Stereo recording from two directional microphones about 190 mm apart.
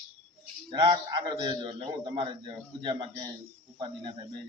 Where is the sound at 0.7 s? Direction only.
25° right (ahead or behind).